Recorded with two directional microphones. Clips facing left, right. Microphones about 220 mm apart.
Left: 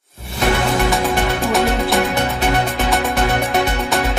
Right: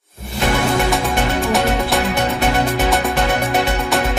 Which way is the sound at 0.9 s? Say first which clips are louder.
Left 1 dB; centre (ahead or behind).